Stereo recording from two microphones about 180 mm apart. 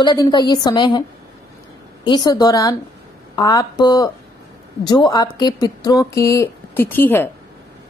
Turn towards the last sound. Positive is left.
turn(degrees=10)  # may be behind; listen again after turning